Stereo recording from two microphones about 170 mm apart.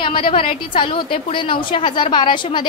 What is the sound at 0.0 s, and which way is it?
A woman's voice, 30° left (ahead or behind).